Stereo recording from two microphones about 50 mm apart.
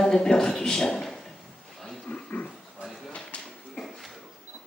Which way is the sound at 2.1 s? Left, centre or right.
Left.